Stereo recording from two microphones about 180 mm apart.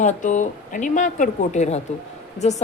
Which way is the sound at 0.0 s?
45° left (ahead or behind).